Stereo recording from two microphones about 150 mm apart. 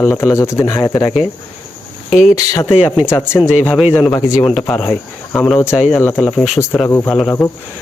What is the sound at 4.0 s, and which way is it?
Speech, 20° left (ahead or behind).